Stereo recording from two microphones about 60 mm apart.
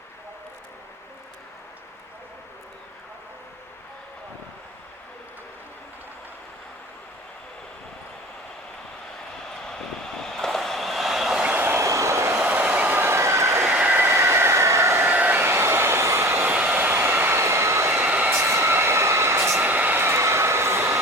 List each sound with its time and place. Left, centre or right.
10.2 s train: centre
11.6 s vehicle: right
12.5 s train: right
13.1 s vehicle: right
13.7 s train: right
14.1 s train: right
15.0 s a sound: right
16.4 s a sound: right
17.0 s train: right
18.1 s train: right
18.3 s train: right
19.6 s train: right